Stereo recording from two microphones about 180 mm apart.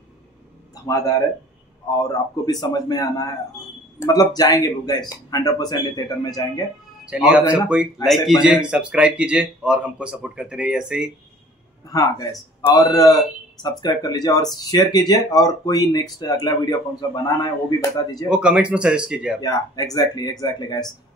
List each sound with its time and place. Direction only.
0.8 s speech: 20° left (ahead or behind)
7.1 s speech: 5° right (ahead or behind)
11.9 s speech: 20° left (ahead or behind)
18.3 s speech: 5° right (ahead or behind)
19.4 s speech: 20° left (ahead or behind)